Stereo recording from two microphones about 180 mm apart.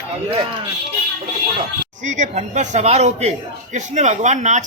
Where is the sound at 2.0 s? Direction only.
40° right (ahead or behind).